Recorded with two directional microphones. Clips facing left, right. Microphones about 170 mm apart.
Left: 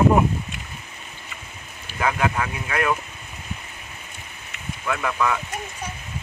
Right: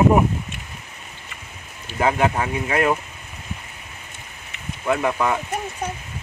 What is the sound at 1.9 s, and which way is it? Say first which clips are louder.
Speech: right 4 dB; 30° right (ahead or behind).